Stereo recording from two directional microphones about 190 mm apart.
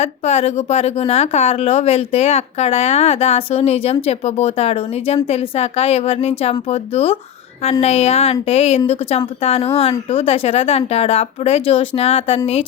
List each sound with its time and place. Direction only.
0.0 s a woman's voice: 35° left (ahead or behind)